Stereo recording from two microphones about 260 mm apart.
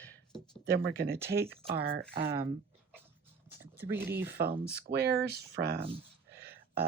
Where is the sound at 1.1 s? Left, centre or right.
Centre.